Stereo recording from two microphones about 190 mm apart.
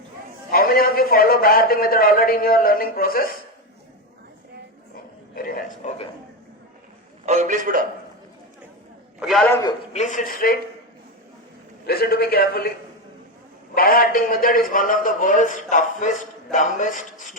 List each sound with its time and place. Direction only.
0.5 s a man's voice: 50° left (ahead or behind)
5.3 s a sound: 50° left (ahead or behind)
7.3 s a man's voice: 40° right (ahead or behind)
9.2 s a man's voice: centre (ahead or behind)
9.5 s a man's voice: 20° left (ahead or behind)
9.9 s a man's voice: 40° left (ahead or behind)
11.9 s a man's voice: 55° left (ahead or behind)
13.7 s a man's voice: 50° left (ahead or behind)